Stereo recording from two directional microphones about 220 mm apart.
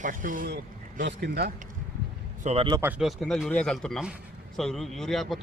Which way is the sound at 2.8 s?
5° right (ahead or behind).